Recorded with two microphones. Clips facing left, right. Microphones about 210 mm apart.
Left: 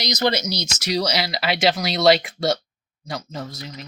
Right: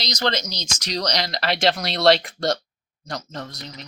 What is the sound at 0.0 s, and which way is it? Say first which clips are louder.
Speech: left 3 dB; 10° left (ahead or behind).